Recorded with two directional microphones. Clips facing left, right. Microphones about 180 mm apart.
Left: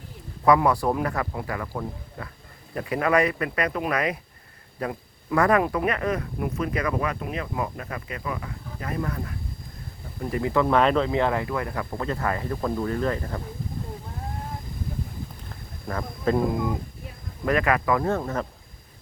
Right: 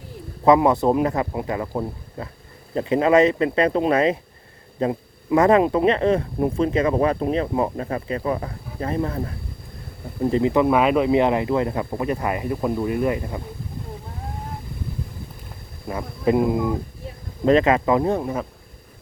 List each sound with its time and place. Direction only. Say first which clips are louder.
0.4 s speech: right 4 dB; 20° right (ahead or behind)
10.7 s speech: right 3 dB; 10° right (ahead or behind)
15.9 s speech: right 4 dB; 15° right (ahead or behind)